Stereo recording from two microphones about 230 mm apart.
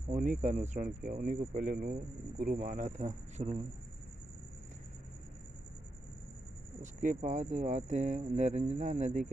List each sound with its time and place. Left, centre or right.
0.1 s speech: right
6.8 s speech: right